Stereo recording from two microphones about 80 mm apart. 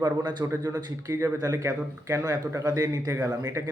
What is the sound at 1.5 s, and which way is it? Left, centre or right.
Speech, right.